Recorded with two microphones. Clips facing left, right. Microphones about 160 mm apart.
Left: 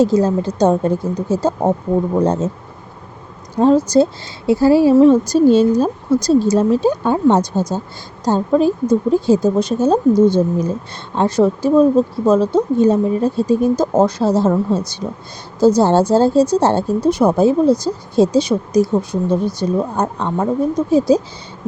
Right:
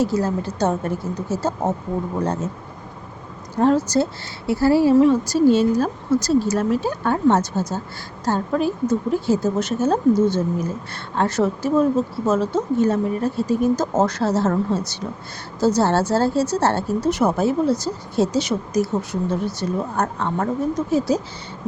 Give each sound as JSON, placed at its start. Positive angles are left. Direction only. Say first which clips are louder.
{"t": 0.0, "sound": "a woman's voice", "louder": "left 7 dB", "side_deg": 20}
{"t": 3.6, "sound": "a woman's voice", "louder": "left 6 dB", "side_deg": 15}